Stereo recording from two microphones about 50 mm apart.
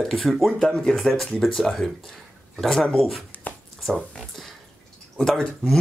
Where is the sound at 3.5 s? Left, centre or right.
Left.